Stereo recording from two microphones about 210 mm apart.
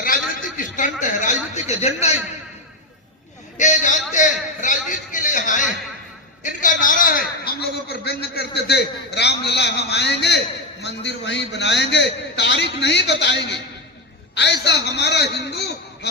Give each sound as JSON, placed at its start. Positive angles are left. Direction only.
{"t": 0.0, "sound": "a man's voice", "side_deg": 40}
{"t": 3.6, "sound": "a sound", "side_deg": 35}
{"t": 6.4, "sound": "a man's voice", "side_deg": 40}